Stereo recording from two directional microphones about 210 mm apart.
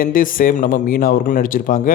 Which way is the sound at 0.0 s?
40° left (ahead or behind).